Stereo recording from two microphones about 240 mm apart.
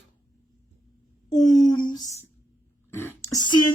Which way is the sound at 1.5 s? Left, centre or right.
Centre.